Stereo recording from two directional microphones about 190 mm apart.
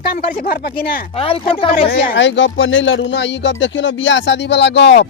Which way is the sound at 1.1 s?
30° left (ahead or behind).